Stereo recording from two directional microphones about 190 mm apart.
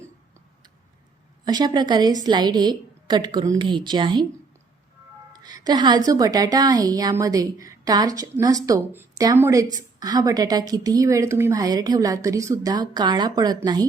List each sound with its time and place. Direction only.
1.5 s a woman's voice: 20° right (ahead or behind)
5.3 s a woman's voice: 20° right (ahead or behind)